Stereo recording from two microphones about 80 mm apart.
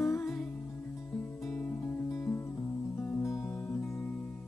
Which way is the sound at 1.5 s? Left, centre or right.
Left.